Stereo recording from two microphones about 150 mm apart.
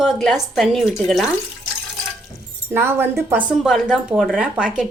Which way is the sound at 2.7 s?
15° right (ahead or behind).